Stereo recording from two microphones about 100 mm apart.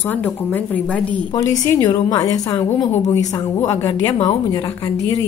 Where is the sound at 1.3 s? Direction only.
35° left (ahead or behind).